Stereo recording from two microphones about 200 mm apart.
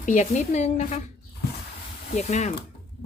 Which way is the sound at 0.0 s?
40° left (ahead or behind).